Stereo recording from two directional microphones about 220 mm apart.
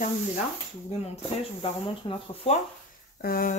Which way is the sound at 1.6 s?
25° left (ahead or behind).